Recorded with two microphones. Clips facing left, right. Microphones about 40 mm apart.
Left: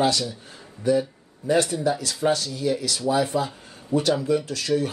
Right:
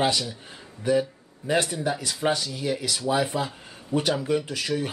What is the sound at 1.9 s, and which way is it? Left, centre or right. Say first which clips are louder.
Speech: left 2 dB; centre.